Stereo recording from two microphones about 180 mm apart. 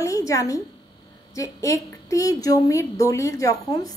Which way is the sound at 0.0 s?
20° left (ahead or behind).